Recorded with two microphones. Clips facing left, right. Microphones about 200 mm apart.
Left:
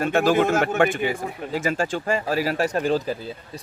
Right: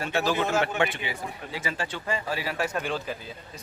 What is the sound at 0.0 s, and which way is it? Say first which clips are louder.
Speech: left 7 dB; 50° left (ahead or behind).